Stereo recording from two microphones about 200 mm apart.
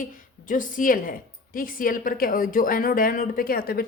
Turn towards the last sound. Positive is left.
turn(degrees=50)  # may be behind; listen again after turning